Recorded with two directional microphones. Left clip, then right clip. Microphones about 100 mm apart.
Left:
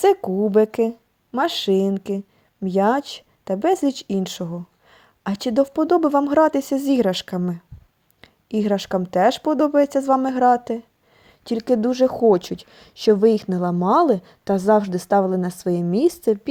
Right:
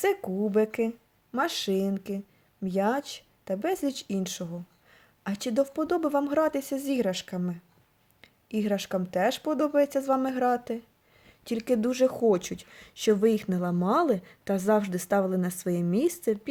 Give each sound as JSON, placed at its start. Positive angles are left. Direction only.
{"t": 0.0, "sound": "speech", "side_deg": 65}
{"t": 1.4, "sound": "speech", "side_deg": 60}
{"t": 8.2, "sound": "a woman's voice", "side_deg": 70}